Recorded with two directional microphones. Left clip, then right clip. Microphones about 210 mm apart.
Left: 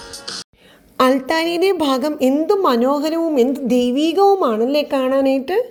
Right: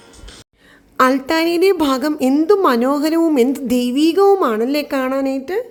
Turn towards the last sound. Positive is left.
turn(degrees=0)  # may be behind; listen again after turning